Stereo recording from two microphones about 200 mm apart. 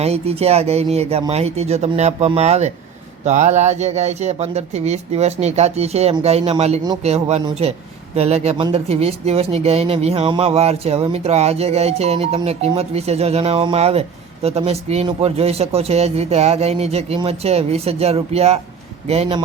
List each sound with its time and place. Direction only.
0.0 s speech: 30° right (ahead or behind)